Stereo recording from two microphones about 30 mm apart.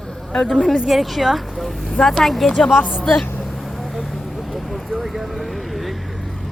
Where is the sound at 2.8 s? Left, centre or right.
Left.